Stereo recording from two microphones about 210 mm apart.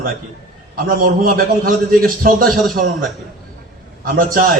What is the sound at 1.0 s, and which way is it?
A man's voice, 40° right (ahead or behind).